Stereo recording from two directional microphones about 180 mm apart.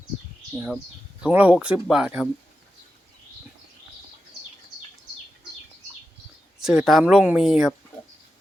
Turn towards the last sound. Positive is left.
turn(degrees=-5)  # may be behind; listen again after turning